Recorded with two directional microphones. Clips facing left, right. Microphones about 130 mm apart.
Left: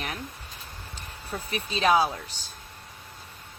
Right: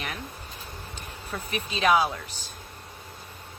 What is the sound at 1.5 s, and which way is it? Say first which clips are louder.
Speech: even; 35° left (ahead or behind).